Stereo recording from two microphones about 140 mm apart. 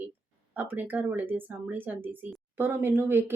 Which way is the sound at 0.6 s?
15° right (ahead or behind).